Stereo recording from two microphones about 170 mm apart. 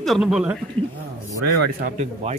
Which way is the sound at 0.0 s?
Centre (ahead or behind).